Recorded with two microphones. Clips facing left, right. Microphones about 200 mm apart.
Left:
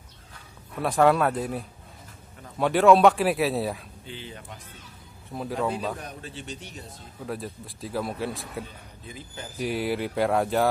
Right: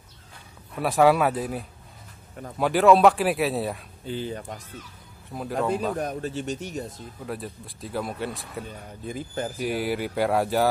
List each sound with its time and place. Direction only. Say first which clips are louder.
0.7 s speech: right 1 dB; 5° right (ahead or behind)
4.0 s speech: right 9 dB; 40° right (ahead or behind)
5.3 s speech: right 2 dB; centre (ahead or behind)
5.9 s speech: right 10 dB; 45° right (ahead or behind)
7.2 s speech: left 1 dB; centre (ahead or behind)
9.0 s speech: right 10 dB; 50° right (ahead or behind)
9.6 s speech: left 1 dB; centre (ahead or behind)